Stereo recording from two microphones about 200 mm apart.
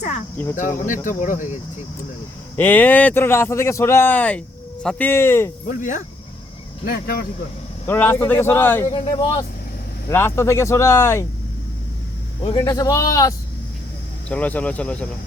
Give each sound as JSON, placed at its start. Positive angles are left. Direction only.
{"t": 1.0, "sound": "speech", "side_deg": 40}
{"t": 2.6, "sound": "speech", "side_deg": 10}
{"t": 5.6, "sound": "speech", "side_deg": 40}
{"t": 7.9, "sound": "speech", "side_deg": 10}
{"t": 8.9, "sound": "speech", "side_deg": 20}
{"t": 12.4, "sound": "speech", "side_deg": 25}